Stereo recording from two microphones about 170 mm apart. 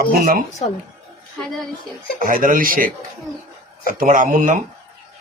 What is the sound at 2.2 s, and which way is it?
A man's voice, 55° right (ahead or behind).